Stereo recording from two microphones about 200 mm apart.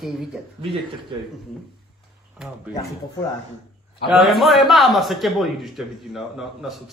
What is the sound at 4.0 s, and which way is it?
A man's voice, centre (ahead or behind).